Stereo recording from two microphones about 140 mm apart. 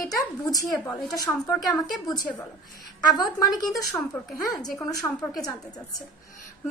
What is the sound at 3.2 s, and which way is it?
A woman's voice, 25° left (ahead or behind).